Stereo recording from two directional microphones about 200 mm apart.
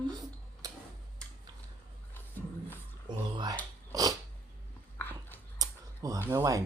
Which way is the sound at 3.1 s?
20° right (ahead or behind).